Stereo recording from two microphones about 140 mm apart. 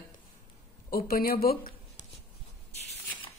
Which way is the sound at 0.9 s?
90° left.